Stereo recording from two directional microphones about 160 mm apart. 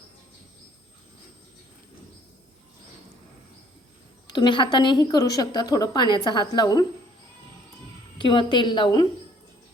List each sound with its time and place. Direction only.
4.3 s a woman's voice: 30° left (ahead or behind)
8.2 s a woman's voice: 30° left (ahead or behind)